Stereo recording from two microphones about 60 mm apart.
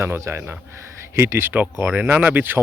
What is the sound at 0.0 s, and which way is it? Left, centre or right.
Speech, right.